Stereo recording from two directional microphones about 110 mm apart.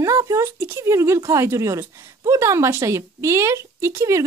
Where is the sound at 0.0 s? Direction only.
30° right (ahead or behind).